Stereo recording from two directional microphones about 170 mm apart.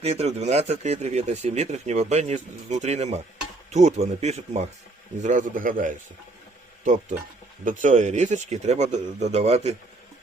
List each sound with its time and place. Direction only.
0.0 s speech: 35° right (ahead or behind)